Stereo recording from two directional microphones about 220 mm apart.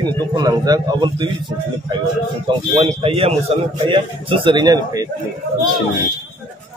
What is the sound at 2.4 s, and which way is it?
A man's voice, 30° right (ahead or behind).